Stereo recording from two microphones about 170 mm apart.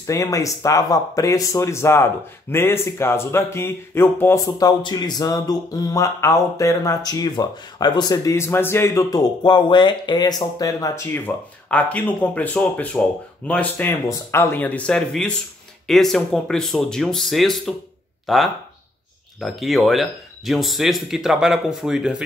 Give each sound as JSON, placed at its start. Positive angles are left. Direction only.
{"t": 0.0, "sound": "speech", "side_deg": 20}